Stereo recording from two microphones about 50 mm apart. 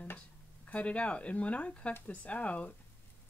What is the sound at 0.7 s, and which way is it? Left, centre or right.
Speech, left.